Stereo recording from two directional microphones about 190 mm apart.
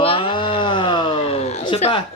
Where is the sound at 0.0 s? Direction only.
30° left (ahead or behind).